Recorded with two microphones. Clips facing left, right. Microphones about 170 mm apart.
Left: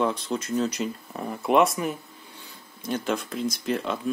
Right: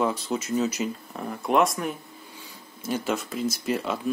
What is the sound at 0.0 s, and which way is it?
Speech, 5° right (ahead or behind).